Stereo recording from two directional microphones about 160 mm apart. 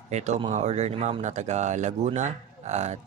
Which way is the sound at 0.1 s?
45° right (ahead or behind).